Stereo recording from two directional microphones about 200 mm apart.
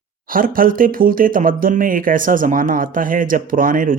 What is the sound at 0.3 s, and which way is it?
Speech, 45° right (ahead or behind).